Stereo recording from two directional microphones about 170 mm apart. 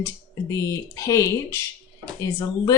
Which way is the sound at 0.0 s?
20° left (ahead or behind).